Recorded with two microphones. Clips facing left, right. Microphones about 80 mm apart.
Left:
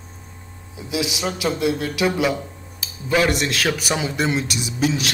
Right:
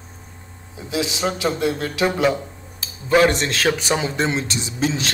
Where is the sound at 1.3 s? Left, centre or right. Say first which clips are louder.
Left 2 dB; right.